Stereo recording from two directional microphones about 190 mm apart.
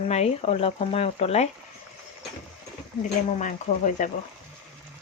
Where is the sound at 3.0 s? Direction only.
40° left (ahead or behind).